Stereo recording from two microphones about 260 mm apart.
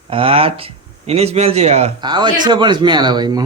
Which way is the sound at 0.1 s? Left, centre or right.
Right.